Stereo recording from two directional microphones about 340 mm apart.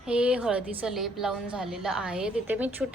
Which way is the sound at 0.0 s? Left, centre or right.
Centre.